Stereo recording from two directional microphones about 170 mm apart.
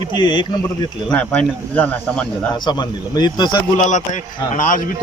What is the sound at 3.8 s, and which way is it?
Speech, 45° left (ahead or behind).